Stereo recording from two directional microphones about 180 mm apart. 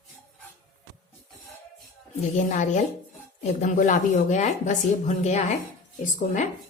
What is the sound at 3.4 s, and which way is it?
A woman's voice, 40° left (ahead or behind).